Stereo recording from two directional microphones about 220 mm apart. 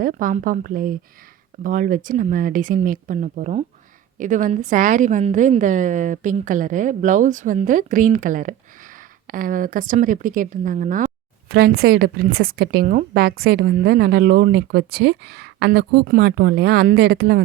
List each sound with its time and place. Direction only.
0.0 s a woman's voice: 40° right (ahead or behind)